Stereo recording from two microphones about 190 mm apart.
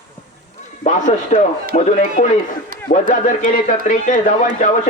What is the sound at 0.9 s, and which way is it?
Speech, 40° left (ahead or behind).